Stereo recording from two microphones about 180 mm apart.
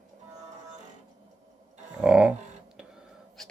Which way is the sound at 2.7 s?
5° right (ahead or behind).